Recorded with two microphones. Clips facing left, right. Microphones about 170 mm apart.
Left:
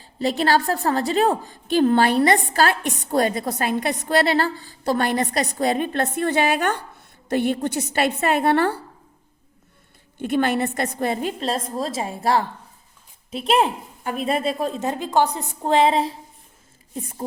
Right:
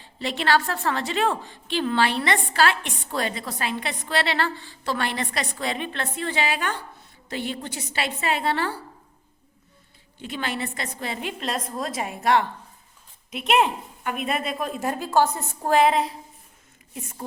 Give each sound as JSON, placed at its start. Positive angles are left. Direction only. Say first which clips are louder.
{"t": 0.0, "sound": "a woman's voice", "louder": "left 6 dB", "side_deg": 40}
{"t": 10.2, "sound": "a woman's voice", "louder": "left 9 dB", "side_deg": 55}